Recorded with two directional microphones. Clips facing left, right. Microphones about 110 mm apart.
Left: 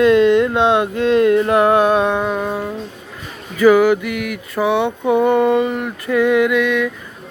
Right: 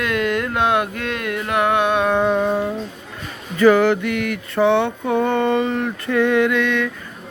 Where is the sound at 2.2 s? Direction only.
Centre (ahead or behind).